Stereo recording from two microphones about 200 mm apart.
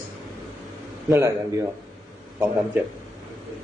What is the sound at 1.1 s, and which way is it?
Speech, 15° right (ahead or behind).